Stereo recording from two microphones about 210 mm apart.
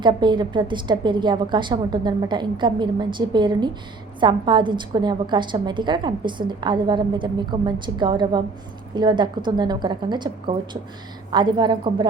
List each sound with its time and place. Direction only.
0.0 s a woman's voice: 20° right (ahead or behind)